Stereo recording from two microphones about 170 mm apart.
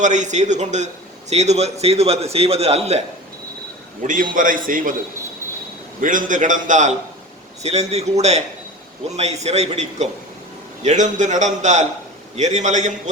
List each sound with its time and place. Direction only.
0.0 s a man's voice: 45° right (ahead or behind)
4.0 s a man's voice: 50° right (ahead or behind)
6.0 s a man's voice: 50° right (ahead or behind)